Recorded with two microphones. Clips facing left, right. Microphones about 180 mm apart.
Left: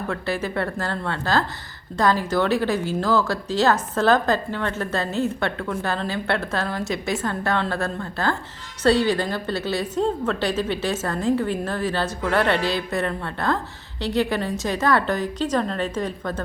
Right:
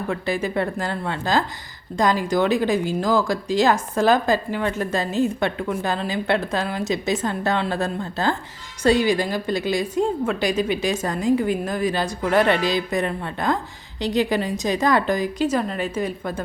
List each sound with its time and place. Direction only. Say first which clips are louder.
0.1 s speech: right 2 dB; 15° right (ahead or behind)